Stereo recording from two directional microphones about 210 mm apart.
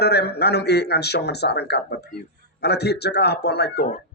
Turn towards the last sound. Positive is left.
turn(degrees=50)  # may be behind; listen again after turning